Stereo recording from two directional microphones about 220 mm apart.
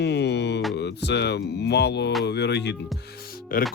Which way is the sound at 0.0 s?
50° left (ahead or behind).